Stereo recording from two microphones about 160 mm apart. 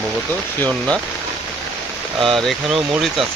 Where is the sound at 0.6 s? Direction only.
5° left (ahead or behind).